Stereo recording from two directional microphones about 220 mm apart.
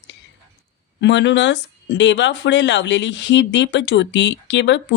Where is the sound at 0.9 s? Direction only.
55° left (ahead or behind).